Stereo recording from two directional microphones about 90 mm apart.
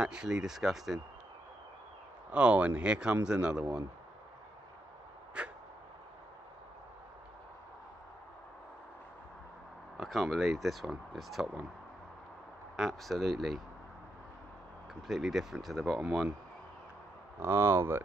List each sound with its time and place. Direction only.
0.0 s speech: 10° right (ahead or behind)
2.3 s speech: 15° right (ahead or behind)
5.4 s a sound: 10° right (ahead or behind)
9.9 s speech: centre (ahead or behind)
12.7 s speech: centre (ahead or behind)
15.0 s speech: 5° right (ahead or behind)
17.4 s speech: 30° right (ahead or behind)